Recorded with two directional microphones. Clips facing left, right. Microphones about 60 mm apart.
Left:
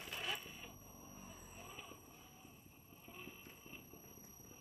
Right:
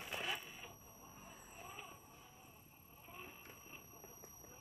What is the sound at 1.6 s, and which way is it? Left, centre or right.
Wild animals, centre.